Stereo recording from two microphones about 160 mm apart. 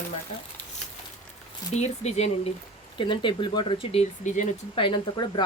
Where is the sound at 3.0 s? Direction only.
30° left (ahead or behind).